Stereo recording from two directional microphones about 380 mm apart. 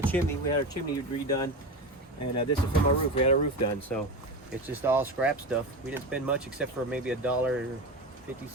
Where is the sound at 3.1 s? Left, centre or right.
Centre.